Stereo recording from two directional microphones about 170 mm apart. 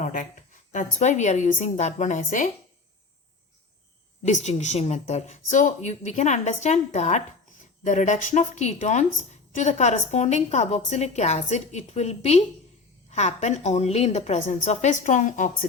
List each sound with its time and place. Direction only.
0.0 s a sound: 50° left (ahead or behind)
0.7 s a woman's voice: 45° left (ahead or behind)
4.3 s a woman's voice: 45° left (ahead or behind)